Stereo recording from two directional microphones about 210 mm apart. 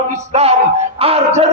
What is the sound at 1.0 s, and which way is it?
Music, 30° right (ahead or behind).